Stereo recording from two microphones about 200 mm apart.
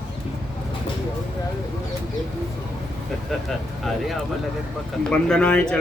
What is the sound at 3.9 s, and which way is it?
Speech, centre (ahead or behind).